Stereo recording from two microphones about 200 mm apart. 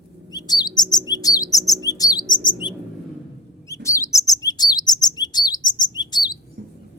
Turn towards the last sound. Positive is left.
turn(degrees=-60)  # may be behind; listen again after turning